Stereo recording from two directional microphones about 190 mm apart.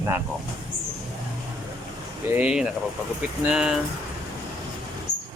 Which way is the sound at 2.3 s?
5° right (ahead or behind).